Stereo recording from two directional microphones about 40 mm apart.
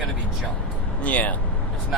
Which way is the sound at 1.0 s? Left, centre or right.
Left.